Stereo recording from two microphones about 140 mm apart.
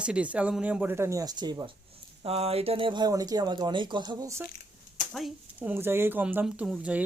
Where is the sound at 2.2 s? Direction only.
45° right (ahead or behind); by 4.4 s 25° right (ahead or behind).